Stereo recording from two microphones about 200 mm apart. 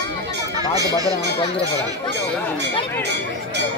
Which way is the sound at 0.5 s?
20° right (ahead or behind).